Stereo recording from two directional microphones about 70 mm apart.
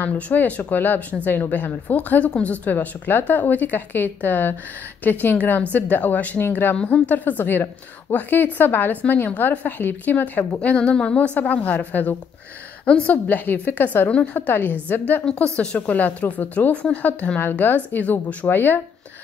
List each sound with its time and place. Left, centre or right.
0.0 s a woman's voice: left; by 11.1 s centre
11.1 s speech: left